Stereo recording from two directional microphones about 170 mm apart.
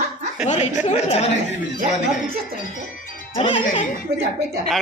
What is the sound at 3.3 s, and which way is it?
Speech, 30° left (ahead or behind).